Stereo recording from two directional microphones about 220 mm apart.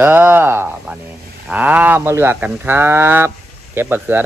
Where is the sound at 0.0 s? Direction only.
10° right (ahead or behind).